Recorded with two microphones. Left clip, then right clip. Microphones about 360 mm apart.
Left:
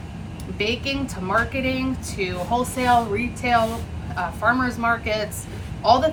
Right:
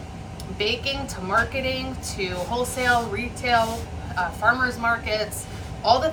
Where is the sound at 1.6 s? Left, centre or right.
Centre.